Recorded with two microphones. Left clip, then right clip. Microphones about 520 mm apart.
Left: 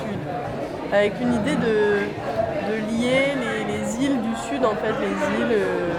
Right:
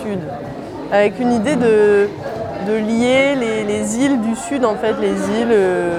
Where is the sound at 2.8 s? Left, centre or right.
Right.